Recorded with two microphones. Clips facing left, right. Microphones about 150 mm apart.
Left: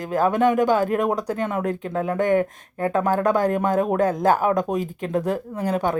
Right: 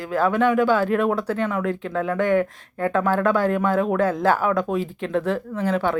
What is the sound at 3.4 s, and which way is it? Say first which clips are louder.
Speech: even; 45° left (ahead or behind).